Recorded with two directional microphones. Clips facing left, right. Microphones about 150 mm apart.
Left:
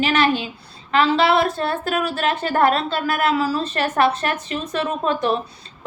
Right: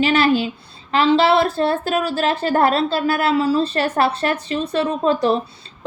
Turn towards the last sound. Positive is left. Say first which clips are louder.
# right 3 dB
turn(degrees=-35)  # may be behind; listen again after turning